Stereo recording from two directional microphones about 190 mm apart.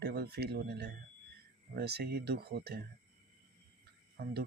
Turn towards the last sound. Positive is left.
turn(degrees=-55)  # may be behind; listen again after turning